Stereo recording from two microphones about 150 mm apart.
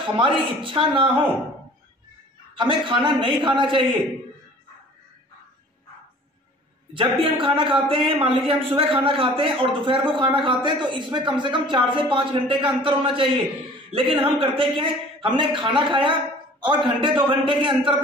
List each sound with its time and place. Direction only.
0.0 s a man's voice: 35° right (ahead or behind)
2.5 s a man's voice: 35° right (ahead or behind)
6.9 s a man's voice: 35° right (ahead or behind)